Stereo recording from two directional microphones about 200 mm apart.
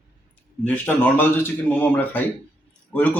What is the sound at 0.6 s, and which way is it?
Speech, 5° left (ahead or behind).